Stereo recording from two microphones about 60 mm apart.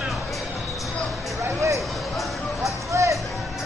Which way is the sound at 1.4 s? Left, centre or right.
Right.